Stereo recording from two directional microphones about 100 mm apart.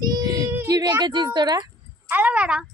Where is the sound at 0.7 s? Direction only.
40° right (ahead or behind).